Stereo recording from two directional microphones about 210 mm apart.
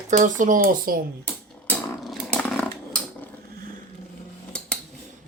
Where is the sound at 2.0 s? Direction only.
Centre (ahead or behind).